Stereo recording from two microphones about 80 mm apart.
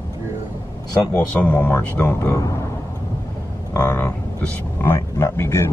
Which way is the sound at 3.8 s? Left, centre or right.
Centre.